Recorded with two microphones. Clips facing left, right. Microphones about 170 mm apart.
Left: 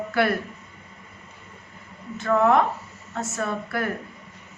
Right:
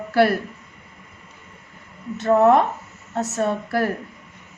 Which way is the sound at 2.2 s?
40° right (ahead or behind).